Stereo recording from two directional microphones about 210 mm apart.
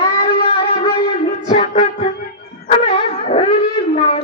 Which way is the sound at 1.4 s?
35° left (ahead or behind).